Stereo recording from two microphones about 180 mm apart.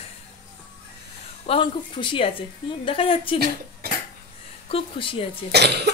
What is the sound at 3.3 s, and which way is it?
Speech, 60° right (ahead or behind).